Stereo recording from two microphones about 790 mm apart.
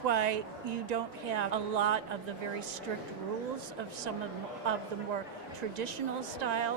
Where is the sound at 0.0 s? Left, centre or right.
Right.